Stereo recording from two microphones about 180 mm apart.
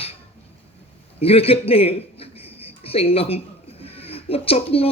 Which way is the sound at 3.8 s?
35° left (ahead or behind).